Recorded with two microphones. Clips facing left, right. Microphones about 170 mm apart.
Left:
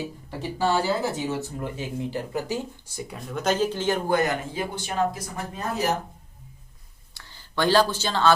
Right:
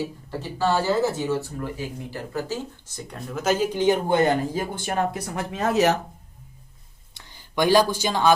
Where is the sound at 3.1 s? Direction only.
Centre (ahead or behind); by 4.2 s 15° right (ahead or behind).